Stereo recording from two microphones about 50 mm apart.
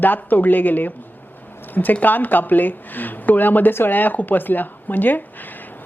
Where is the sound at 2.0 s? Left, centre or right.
Left.